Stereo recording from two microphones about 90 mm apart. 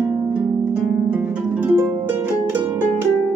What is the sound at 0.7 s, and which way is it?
Harp, 15° right (ahead or behind).